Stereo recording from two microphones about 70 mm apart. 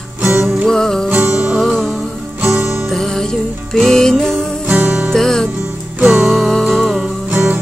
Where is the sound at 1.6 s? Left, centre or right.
Centre.